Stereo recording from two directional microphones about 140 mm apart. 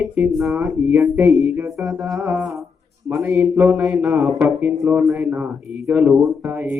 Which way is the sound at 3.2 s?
20° right (ahead or behind).